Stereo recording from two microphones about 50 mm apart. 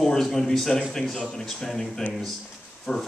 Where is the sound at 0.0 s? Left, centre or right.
Centre.